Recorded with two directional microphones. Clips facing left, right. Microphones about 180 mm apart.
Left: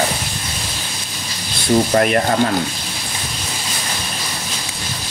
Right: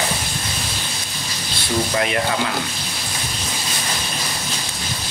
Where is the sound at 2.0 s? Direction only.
50° left (ahead or behind).